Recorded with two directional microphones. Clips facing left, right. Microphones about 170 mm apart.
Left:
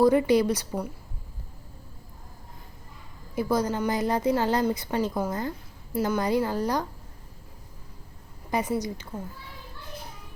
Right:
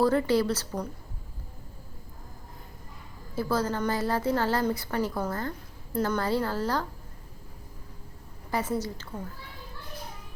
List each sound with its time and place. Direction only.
0.0 s a woman's voice: 15° left (ahead or behind)
3.3 s a woman's voice: 15° left (ahead or behind)
8.4 s a woman's voice: 15° left (ahead or behind)